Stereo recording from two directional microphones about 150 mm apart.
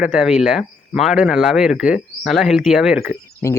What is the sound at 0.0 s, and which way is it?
Speech, 5° right (ahead or behind).